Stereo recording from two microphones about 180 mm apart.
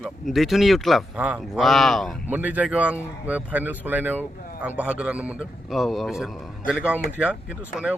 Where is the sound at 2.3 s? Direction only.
10° right (ahead or behind).